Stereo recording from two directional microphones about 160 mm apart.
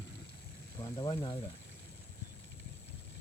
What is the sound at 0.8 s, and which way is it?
Speech, 25° left (ahead or behind).